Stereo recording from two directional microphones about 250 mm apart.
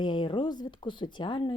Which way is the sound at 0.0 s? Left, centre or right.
Centre.